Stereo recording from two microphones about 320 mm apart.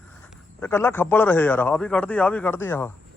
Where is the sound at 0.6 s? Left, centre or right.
Centre.